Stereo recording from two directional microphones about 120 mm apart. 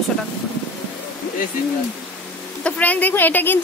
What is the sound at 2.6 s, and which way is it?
Speech, 15° left (ahead or behind).